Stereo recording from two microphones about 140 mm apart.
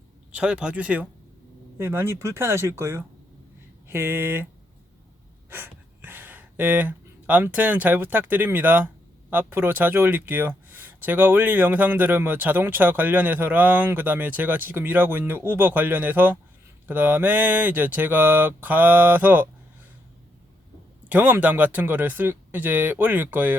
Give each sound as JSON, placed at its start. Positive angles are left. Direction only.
{"t": 0.3, "sound": "speech", "side_deg": -10}
{"t": 5.5, "sound": "speech", "side_deg": -15}
{"t": 21.1, "sound": "speech", "side_deg": -10}